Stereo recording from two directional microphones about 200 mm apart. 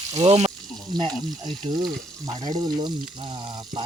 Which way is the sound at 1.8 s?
25° right (ahead or behind).